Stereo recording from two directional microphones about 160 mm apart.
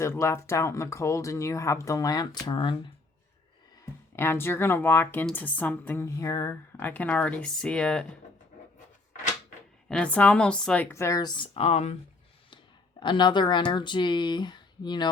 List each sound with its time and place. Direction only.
0.0 s speech: 15° left (ahead or behind)
4.1 s speech: 15° left (ahead or behind)
9.9 s speech: 10° left (ahead or behind); by 11.9 s 40° left (ahead or behind)
13.0 s speech: 30° left (ahead or behind)